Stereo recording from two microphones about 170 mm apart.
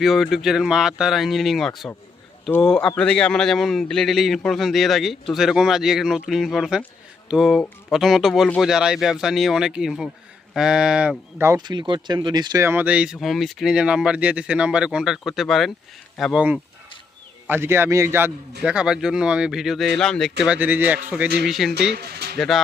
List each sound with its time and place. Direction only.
0.0 s a man's voice: centre (ahead or behind); by 12.6 s 25° right (ahead or behind)
12.6 s a man's voice: 10° right (ahead or behind)
20.4 s a man's voice: 10° right (ahead or behind)
21.9 s speech: 70° right (ahead or behind)
22.4 s a man's voice: centre (ahead or behind)